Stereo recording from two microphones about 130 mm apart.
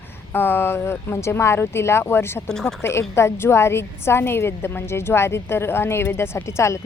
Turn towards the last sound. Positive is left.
turn(degrees=20)  # may be behind; listen again after turning